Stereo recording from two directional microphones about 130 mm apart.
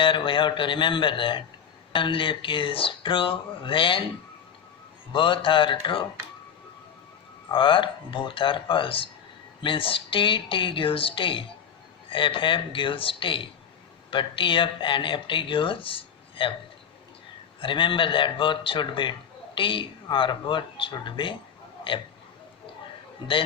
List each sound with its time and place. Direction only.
0.0 s speech: 40° left (ahead or behind)
5.1 s speech: 40° left (ahead or behind)
7.5 s speech: 40° left (ahead or behind)
17.6 s speech: 40° left (ahead or behind)